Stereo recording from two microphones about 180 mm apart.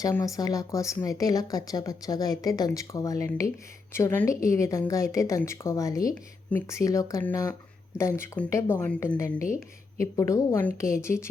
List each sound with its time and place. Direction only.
0.0 s a woman's voice: 20° left (ahead or behind)